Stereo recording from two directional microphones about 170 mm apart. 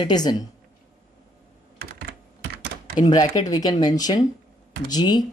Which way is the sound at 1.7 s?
70° right (ahead or behind).